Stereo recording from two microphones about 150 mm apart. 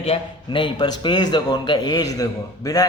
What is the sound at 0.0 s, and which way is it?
A man's voice, 35° left (ahead or behind).